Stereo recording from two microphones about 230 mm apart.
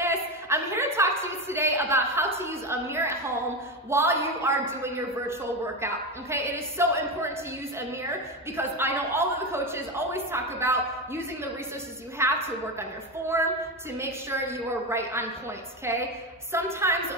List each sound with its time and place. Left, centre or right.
0.0 s a sound: centre
3.9 s a man's voice: centre
8.5 s a man's voice: centre